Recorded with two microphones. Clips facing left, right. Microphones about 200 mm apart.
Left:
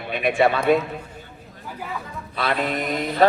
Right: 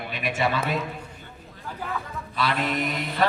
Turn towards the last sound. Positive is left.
turn(degrees=50)  # may be behind; listen again after turning